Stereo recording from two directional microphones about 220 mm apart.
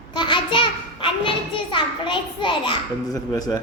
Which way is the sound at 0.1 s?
20° left (ahead or behind).